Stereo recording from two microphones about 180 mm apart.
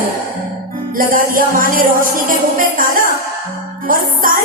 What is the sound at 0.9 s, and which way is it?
Music, 50° right (ahead or behind).